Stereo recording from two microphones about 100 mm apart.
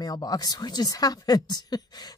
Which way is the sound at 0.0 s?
40° left (ahead or behind).